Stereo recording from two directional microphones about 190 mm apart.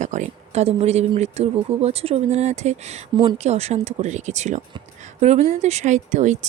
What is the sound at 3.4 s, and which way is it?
Speech, 35° right (ahead or behind).